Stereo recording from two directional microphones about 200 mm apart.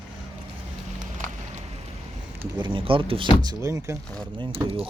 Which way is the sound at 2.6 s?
25° right (ahead or behind).